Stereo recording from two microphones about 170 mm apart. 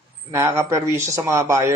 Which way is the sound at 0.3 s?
15° right (ahead or behind).